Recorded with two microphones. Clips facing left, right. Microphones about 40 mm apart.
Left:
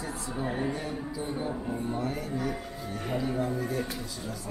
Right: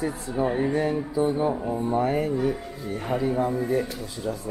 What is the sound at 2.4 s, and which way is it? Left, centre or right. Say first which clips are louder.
Speech: right 6 dB; centre.